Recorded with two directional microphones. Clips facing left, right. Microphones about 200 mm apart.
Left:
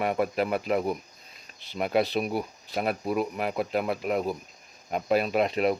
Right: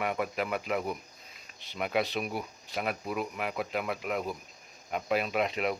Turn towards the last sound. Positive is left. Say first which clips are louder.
# left 6 dB
turn(degrees=40)  # may be behind; listen again after turning